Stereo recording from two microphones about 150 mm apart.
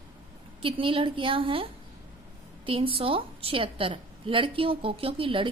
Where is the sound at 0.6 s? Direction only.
35° right (ahead or behind).